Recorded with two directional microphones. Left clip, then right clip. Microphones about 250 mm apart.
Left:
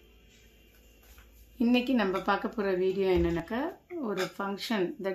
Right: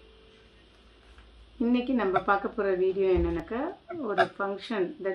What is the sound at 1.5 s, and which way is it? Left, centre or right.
Speech, left.